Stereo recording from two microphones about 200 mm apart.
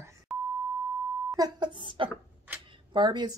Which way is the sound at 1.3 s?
20° right (ahead or behind).